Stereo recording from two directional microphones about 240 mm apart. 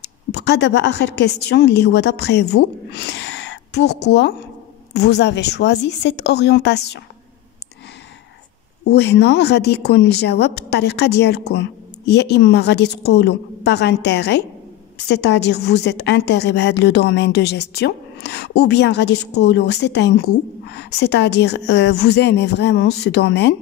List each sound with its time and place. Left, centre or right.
0.0 s a woman's voice: left
8.8 s a woman's voice: left